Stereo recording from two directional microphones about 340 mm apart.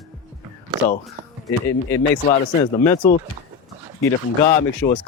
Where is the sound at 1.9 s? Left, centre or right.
Centre.